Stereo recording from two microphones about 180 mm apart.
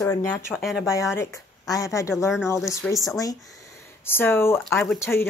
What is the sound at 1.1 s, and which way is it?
Speech, 15° left (ahead or behind).